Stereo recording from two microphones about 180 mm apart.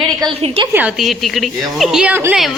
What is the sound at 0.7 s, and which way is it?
A woman's voice, 5° right (ahead or behind).